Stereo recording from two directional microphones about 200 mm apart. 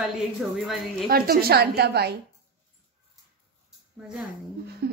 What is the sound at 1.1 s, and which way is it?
A woman's voice, 50° right (ahead or behind).